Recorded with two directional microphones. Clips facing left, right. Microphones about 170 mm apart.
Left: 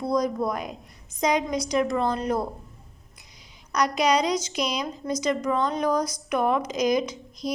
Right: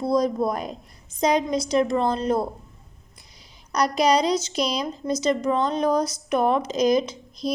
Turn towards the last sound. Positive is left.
turn(degrees=-30)  # may be behind; listen again after turning